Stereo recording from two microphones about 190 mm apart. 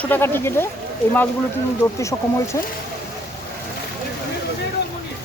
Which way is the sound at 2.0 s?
15° left (ahead or behind).